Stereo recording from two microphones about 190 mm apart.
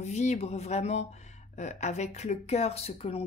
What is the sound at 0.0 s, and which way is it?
Speech, 35° left (ahead or behind).